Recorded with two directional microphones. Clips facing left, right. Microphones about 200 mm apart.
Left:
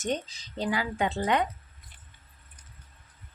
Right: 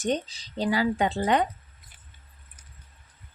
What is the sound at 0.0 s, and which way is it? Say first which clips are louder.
Speech: right 4 dB; 35° right (ahead or behind).